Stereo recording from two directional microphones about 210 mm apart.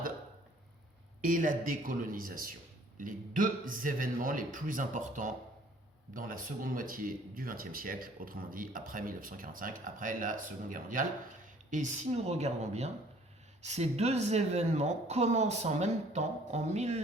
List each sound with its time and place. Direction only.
1.2 s speech: 40° right (ahead or behind)